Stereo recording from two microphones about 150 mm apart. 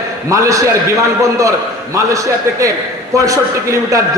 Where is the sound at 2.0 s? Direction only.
20° right (ahead or behind).